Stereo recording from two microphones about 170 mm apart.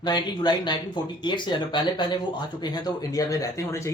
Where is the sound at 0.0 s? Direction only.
25° left (ahead or behind).